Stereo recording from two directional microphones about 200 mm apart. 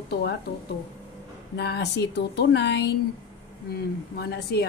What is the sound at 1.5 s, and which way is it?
A woman's voice, 55° left (ahead or behind).